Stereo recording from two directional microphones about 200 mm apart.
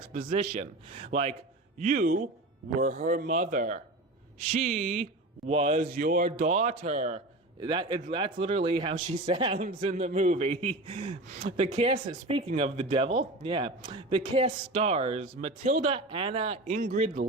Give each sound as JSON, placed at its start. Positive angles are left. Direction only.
{"t": 0.1, "sound": "speech", "side_deg": -40}
{"t": 0.5, "sound": "speech", "side_deg": -30}
{"t": 5.8, "sound": "speech", "side_deg": -45}
{"t": 7.6, "sound": "speech", "side_deg": -25}
{"t": 15.6, "sound": "speech", "side_deg": -40}
{"t": 15.9, "sound": "speech", "side_deg": -25}